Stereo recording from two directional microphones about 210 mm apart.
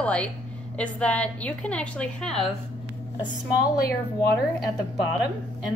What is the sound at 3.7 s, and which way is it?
Speech, 50° left (ahead or behind).